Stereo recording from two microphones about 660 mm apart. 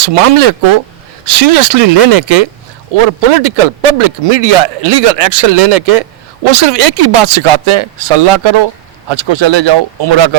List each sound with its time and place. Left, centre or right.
0.0 s speech: right